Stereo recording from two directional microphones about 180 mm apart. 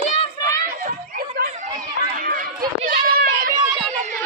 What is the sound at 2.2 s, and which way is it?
Chatter, 50° right (ahead or behind).